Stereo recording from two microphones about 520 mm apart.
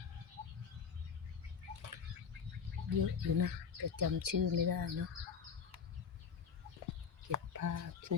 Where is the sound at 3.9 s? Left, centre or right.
Right.